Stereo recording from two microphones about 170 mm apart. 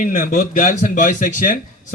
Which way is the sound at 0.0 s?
50° left (ahead or behind).